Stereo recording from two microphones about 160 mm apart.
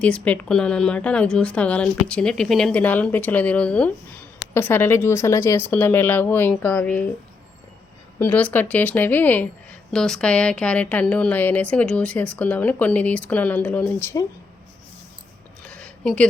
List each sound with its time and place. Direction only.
0.0 s a woman's voice: 5° left (ahead or behind)
8.2 s a woman's voice: 10° left (ahead or behind)
15.7 s a sound: 10° left (ahead or behind)